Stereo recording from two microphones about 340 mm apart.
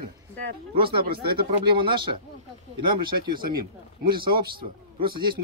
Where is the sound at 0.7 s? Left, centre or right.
Right.